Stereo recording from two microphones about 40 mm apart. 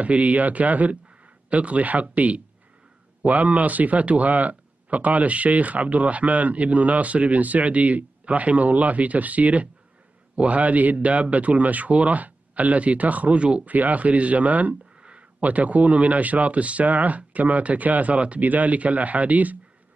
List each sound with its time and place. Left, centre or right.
0.0 s speech: right
13.4 s speech: right
13.7 s speech: right
15.0 s a sound: right
15.4 s speech: right